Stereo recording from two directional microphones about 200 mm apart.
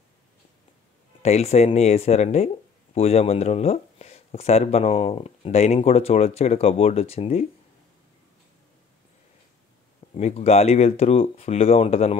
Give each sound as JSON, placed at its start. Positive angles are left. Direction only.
{"t": 1.2, "sound": "speech", "side_deg": 30}
{"t": 10.1, "sound": "speech", "side_deg": 30}